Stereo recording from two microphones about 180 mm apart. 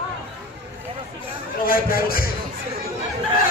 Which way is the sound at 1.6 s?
55° left (ahead or behind).